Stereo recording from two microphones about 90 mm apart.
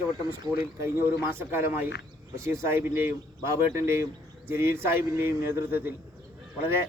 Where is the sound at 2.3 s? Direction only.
30° right (ahead or behind).